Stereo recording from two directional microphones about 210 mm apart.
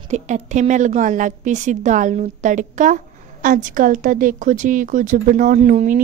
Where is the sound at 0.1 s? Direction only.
35° right (ahead or behind).